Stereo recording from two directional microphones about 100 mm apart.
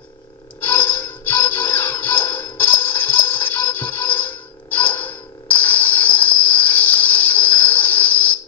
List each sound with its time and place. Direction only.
0.6 s music: 20° left (ahead or behind)